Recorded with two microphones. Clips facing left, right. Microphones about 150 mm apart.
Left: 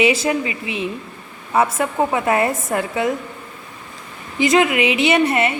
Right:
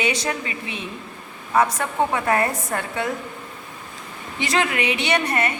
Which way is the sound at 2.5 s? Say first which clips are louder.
Left 5 dB; 5° left (ahead or behind).